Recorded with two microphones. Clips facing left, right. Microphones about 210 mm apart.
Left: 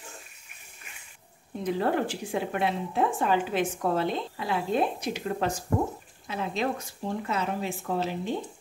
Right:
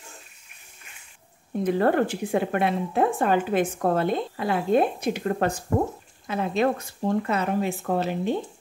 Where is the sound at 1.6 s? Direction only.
55° right (ahead or behind).